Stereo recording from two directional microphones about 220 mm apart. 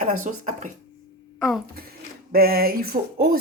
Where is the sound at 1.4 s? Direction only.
Centre (ahead or behind).